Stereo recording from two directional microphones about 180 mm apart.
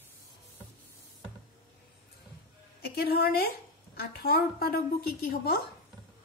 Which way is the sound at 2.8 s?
60° left (ahead or behind).